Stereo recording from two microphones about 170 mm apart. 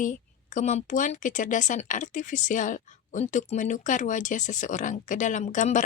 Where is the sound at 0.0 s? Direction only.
50° left (ahead or behind).